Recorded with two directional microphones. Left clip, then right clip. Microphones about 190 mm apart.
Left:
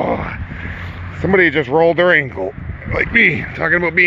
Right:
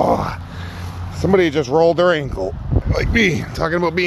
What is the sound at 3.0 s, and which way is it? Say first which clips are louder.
Speech: left 5 dB; 20° right (ahead or behind).